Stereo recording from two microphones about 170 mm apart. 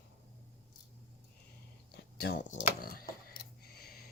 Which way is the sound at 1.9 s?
75° left (ahead or behind).